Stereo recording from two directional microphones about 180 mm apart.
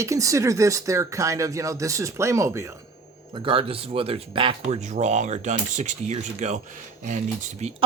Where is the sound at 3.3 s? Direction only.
30° right (ahead or behind).